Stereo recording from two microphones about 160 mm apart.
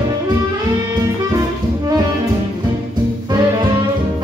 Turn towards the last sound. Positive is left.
turn(degrees=-25)  # may be behind; listen again after turning